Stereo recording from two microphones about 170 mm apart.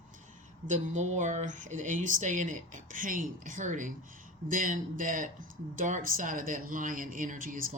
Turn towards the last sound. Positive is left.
turn(degrees=-50)  # may be behind; listen again after turning